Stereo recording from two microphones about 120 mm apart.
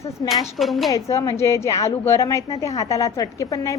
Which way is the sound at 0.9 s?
25° left (ahead or behind).